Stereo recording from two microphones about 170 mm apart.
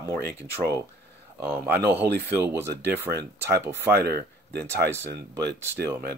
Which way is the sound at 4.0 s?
70° right (ahead or behind).